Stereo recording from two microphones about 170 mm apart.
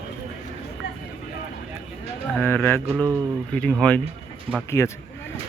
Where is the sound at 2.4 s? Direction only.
10° left (ahead or behind).